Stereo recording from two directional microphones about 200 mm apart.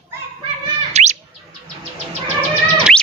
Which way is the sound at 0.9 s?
35° right (ahead or behind).